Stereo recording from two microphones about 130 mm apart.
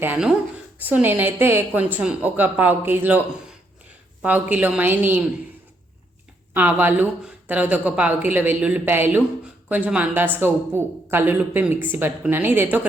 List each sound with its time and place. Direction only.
0.8 s speech: 10° right (ahead or behind)
6.5 s speech: 15° right (ahead or behind)